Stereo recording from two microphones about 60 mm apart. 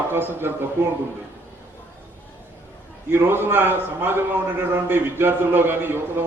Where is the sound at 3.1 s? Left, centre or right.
Right.